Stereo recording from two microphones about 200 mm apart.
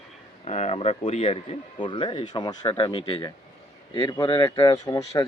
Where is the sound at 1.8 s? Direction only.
25° left (ahead or behind).